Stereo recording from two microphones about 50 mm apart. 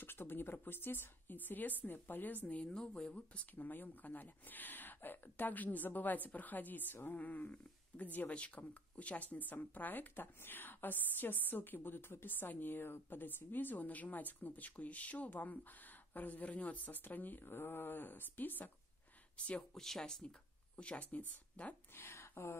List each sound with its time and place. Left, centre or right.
0.0 s speech: left
2.4 s speech: left
19.3 s speech: left
19.7 s speech: centre
20.7 s speech: left
21.9 s a sound: left